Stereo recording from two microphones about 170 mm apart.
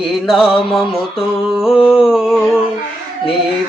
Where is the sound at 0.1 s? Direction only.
Centre (ahead or behind).